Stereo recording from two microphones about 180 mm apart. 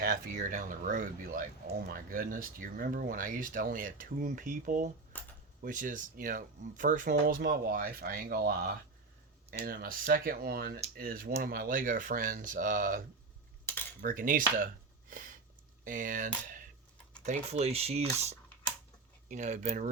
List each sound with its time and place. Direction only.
0.0 s speech: 50° right (ahead or behind)
5.1 s a sound: 10° left (ahead or behind)
5.6 s speech: 45° right (ahead or behind)
13.7 s cutlery: 15° left (ahead or behind)
14.0 s speech: 50° right (ahead or behind)
15.8 s speech: 45° right (ahead or behind)
17.2 s speech: 35° right (ahead or behind)